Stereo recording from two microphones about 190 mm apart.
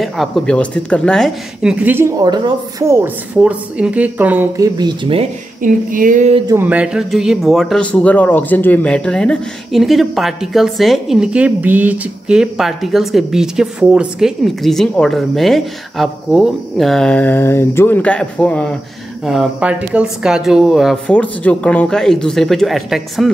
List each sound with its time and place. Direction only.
0.0 s speech: centre (ahead or behind); by 3.0 s 20° right (ahead or behind)
3.0 s speech: 5° right (ahead or behind)
4.7 s speech: 25° right (ahead or behind)
5.6 s a sound: 45° right (ahead or behind)
6.4 s speech: 15° right (ahead or behind)